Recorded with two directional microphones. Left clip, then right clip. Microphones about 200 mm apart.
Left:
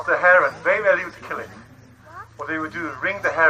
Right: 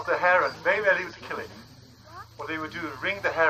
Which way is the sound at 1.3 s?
40° right (ahead or behind).